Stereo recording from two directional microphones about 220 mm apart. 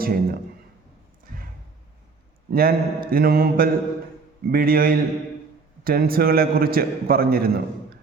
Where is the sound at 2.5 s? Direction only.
45° right (ahead or behind).